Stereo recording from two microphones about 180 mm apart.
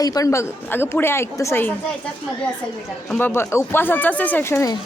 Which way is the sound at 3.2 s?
15° left (ahead or behind).